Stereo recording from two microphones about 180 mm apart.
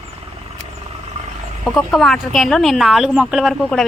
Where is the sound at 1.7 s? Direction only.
Centre (ahead or behind).